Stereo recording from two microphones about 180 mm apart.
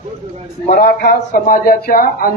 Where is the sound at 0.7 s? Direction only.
55° left (ahead or behind).